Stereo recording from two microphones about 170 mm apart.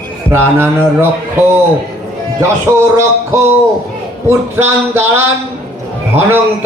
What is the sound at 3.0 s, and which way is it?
A man's voice, 15° right (ahead or behind).